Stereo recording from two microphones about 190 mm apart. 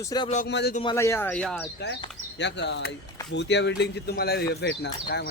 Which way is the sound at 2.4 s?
65° left (ahead or behind).